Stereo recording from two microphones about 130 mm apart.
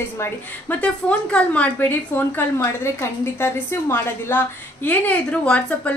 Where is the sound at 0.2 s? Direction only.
10° left (ahead or behind).